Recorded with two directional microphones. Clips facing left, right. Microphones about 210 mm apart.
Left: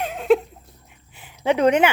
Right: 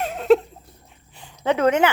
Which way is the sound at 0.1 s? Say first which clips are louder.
Right 2 dB; 5° left (ahead or behind).